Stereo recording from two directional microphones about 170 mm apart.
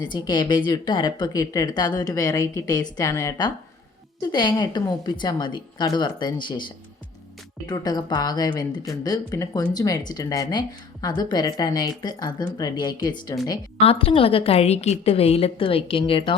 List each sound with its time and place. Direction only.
0.0 s a woman's voice: 25° left (ahead or behind)